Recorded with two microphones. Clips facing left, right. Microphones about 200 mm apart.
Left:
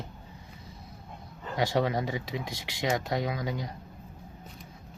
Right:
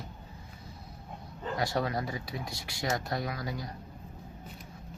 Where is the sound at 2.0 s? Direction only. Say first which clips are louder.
Left 4 dB; 90° left.